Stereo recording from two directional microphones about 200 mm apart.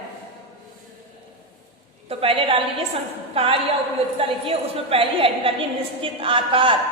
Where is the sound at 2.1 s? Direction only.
30° right (ahead or behind).